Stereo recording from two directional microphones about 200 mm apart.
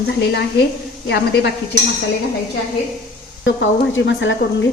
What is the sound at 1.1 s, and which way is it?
Speech, 60° left (ahead or behind).